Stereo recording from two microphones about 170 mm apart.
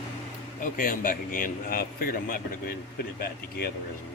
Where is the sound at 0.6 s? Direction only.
55° left (ahead or behind).